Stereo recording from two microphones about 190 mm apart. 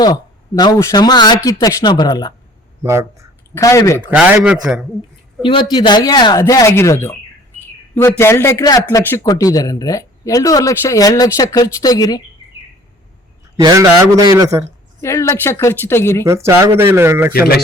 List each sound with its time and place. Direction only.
0.0 s speech: 20° left (ahead or behind)
2.8 s speech: 15° right (ahead or behind)
3.5 s a man's voice: 15° left (ahead or behind)
4.1 s speech: 5° right (ahead or behind)
5.4 s a man's voice: 25° left (ahead or behind)
8.2 s a man's voice: 15° left (ahead or behind)
13.6 s a man's voice: 20° right (ahead or behind)
15.0 s a man's voice: 15° left (ahead or behind)
16.2 s speech: 15° right (ahead or behind)
17.3 s a man's voice: 55° left (ahead or behind)